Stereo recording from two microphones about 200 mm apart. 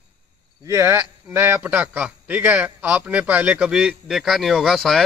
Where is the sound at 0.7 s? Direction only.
15° right (ahead or behind).